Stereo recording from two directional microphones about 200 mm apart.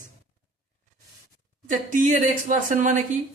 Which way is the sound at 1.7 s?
40° right (ahead or behind).